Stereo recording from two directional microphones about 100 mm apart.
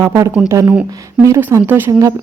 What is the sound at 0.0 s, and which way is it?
Speech, 25° right (ahead or behind).